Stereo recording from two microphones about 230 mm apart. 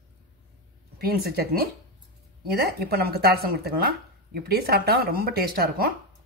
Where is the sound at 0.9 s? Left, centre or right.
Right.